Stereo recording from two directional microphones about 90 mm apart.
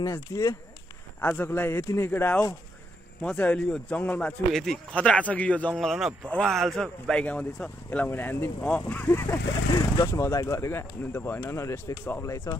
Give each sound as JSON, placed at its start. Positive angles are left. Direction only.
{"t": 0.0, "sound": "speech", "side_deg": 40}
{"t": 1.2, "sound": "speech", "side_deg": 25}
{"t": 3.2, "sound": "speech", "side_deg": 15}
{"t": 4.5, "sound": "a man's voice", "side_deg": 5}
{"t": 4.9, "sound": "speech", "side_deg": 15}
{"t": 5.8, "sound": "a man's voice", "side_deg": 0}
{"t": 9.8, "sound": "speech", "side_deg": 45}
{"t": 10.2, "sound": "speech", "side_deg": 35}